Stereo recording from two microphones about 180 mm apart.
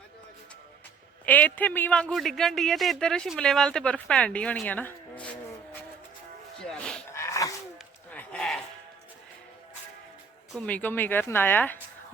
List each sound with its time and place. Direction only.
1.2 s a man's voice: 10° left (ahead or behind)
6.6 s sheep: 5° left (ahead or behind)
7.1 s dog: 15° left (ahead or behind)
8.1 s a sound: 5° left (ahead or behind)
10.5 s speech: 10° left (ahead or behind)